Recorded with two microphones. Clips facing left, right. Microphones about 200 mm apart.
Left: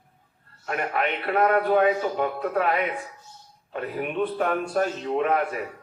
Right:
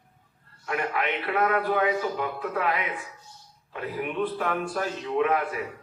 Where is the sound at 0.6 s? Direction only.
40° left (ahead or behind).